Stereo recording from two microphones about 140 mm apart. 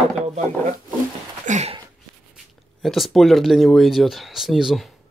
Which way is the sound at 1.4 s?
55° right (ahead or behind).